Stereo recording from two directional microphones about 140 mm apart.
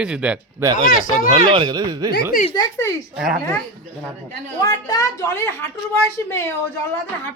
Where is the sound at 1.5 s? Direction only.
30° right (ahead or behind).